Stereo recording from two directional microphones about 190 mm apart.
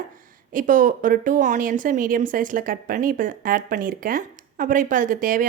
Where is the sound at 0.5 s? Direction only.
45° right (ahead or behind).